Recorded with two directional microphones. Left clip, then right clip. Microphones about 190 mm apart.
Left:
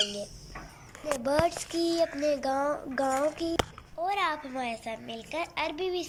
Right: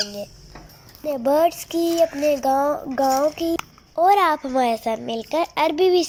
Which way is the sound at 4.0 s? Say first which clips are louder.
Right 13 dB; 45° right (ahead or behind).